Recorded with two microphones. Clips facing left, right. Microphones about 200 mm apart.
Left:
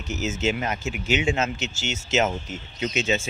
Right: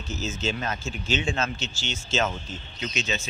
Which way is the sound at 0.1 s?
20° left (ahead or behind).